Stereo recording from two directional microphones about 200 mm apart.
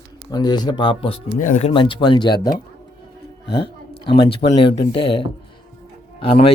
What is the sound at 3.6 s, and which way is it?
A man's voice, 25° left (ahead or behind).